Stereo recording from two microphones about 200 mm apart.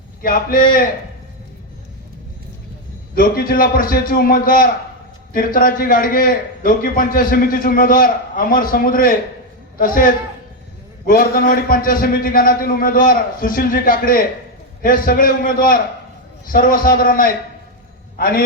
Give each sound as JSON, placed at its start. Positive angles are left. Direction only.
{"t": 0.2, "sound": "a man's voice", "side_deg": 45}
{"t": 3.2, "sound": "a man's voice", "side_deg": 45}